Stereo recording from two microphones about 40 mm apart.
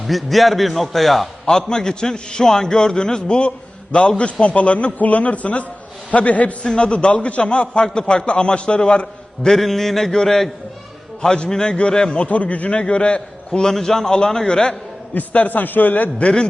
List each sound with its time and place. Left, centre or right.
0.1 s a man's voice: centre
1.5 s a man's voice: centre; by 6.7 s left
6.7 s a man's voice: left
9.6 s a man's voice: centre
11.2 s a man's voice: centre
12.1 s a man's voice: left
12.8 s a man's voice: left
13.7 s a man's voice: centre
15.1 s a man's voice: left